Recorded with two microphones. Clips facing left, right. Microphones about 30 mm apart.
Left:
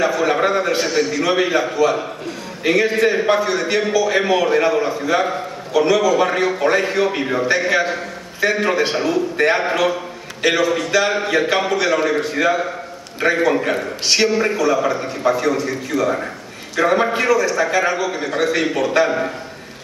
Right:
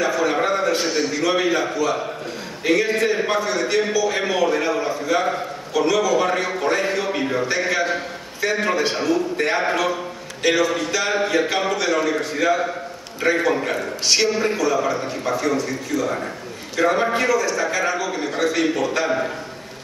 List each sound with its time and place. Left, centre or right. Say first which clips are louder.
0.0 s a man's voice: left 3 dB; centre
0.8 s a man's voice: left 3 dB; centre
1.2 s a man's voice: even; centre